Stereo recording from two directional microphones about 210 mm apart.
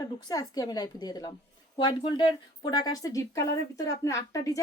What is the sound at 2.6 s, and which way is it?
Speech, 20° left (ahead or behind).